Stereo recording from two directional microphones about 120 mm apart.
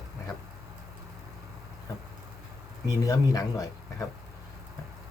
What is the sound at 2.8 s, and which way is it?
Speech, 30° left (ahead or behind).